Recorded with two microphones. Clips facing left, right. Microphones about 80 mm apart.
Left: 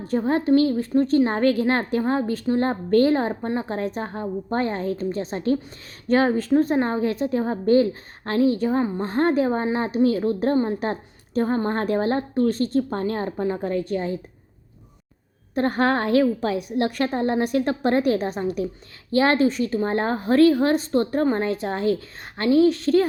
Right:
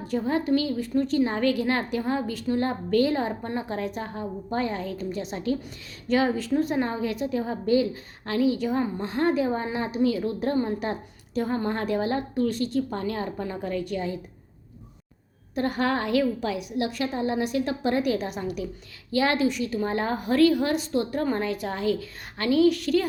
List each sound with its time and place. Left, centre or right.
0.1 s a woman's voice: left
15.5 s a woman's voice: left